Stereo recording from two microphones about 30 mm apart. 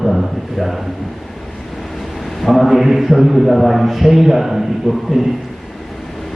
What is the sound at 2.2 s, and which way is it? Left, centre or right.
A man's voice, centre.